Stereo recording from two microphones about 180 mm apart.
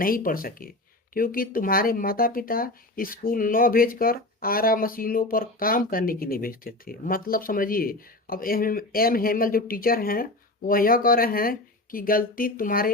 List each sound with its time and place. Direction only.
0.0 s speech: 50° left (ahead or behind)